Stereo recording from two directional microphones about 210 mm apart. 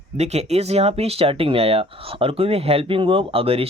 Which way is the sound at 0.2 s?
30° right (ahead or behind).